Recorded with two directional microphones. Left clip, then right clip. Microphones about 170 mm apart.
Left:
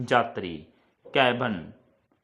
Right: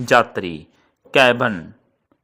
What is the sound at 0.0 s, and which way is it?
Speech, 35° right (ahead or behind).